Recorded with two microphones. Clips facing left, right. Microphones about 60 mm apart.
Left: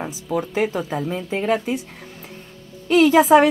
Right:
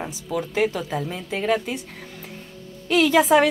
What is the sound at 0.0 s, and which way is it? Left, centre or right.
Speech, centre.